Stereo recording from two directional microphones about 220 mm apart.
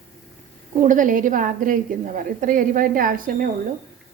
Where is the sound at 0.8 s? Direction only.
35° right (ahead or behind).